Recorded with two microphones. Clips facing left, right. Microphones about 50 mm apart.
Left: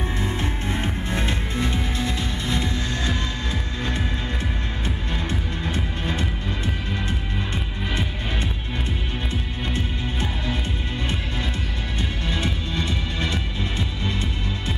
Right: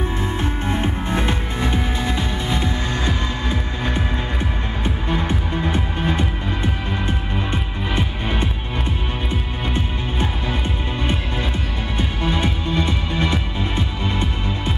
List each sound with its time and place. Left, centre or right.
0.4 s music: right
5.7 s music: right
12.2 s music: right